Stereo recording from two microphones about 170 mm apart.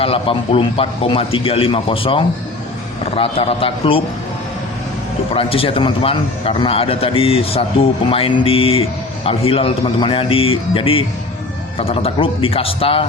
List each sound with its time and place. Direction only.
0.0 s a man's voice: 35° left (ahead or behind)
5.3 s a man's voice: 35° left (ahead or behind)